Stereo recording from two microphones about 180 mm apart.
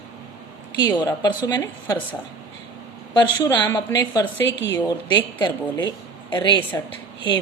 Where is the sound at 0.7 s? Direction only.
25° left (ahead or behind).